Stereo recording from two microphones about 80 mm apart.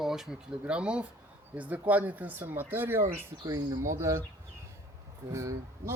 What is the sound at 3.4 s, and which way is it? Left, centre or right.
Speech, right.